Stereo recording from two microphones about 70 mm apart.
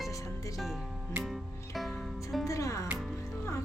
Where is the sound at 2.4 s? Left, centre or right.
Left.